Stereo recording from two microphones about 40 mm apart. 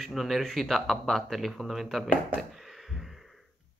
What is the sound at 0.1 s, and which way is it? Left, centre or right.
Speech, centre.